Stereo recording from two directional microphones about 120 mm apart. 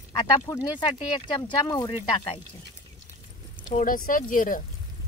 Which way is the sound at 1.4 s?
35° left (ahead or behind).